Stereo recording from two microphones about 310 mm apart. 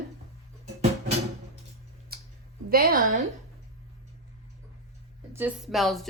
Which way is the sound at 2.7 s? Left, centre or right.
Right.